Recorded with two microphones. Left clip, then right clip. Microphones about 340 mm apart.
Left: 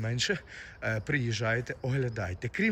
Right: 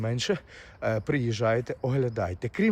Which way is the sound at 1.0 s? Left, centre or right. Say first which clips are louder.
Right 3 dB; centre.